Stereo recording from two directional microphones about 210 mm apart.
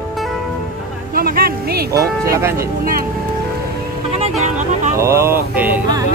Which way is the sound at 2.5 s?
45° right (ahead or behind).